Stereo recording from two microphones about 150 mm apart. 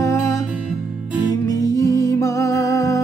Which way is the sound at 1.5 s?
20° left (ahead or behind).